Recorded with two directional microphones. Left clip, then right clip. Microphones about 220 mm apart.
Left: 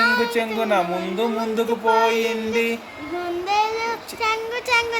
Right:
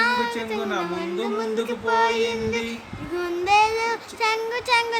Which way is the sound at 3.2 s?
10° right (ahead or behind).